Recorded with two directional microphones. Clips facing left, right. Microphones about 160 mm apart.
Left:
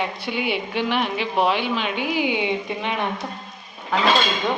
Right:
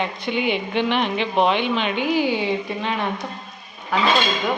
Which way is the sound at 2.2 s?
15° left (ahead or behind).